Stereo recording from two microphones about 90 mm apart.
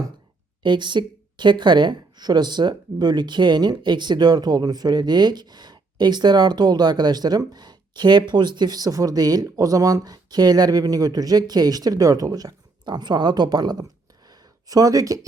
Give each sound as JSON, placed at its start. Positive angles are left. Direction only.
{"t": 0.6, "sound": "speech", "side_deg": -60}